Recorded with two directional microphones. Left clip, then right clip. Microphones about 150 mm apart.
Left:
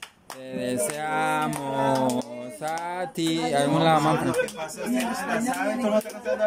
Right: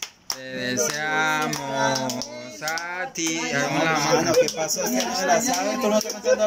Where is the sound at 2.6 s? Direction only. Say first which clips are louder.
Right 1 dB; 20° left (ahead or behind).